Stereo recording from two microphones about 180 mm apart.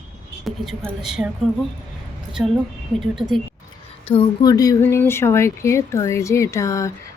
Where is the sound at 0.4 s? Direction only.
Centre (ahead or behind).